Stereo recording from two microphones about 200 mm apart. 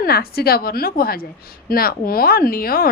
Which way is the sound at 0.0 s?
50° left (ahead or behind).